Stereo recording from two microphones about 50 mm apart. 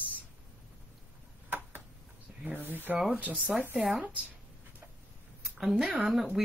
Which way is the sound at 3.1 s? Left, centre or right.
Right.